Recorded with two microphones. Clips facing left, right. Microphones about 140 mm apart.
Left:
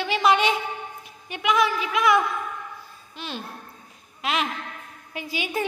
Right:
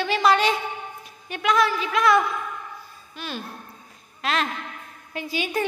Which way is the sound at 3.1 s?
20° left (ahead or behind).